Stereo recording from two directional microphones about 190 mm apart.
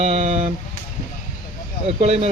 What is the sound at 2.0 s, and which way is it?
Speech, 35° right (ahead or behind).